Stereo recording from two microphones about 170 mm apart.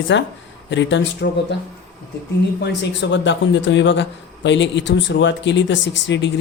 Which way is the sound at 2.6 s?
90° left.